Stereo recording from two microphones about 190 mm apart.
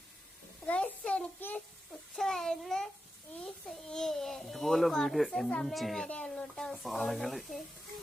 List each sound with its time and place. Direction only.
0.7 s a child's voice: 5° left (ahead or behind)